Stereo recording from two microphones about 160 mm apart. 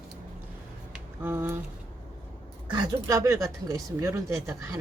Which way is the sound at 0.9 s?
10° right (ahead or behind).